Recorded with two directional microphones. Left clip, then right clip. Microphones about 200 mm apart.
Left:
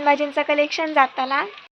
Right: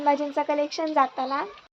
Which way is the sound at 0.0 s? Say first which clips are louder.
Left 4 dB; 10° left (ahead or behind).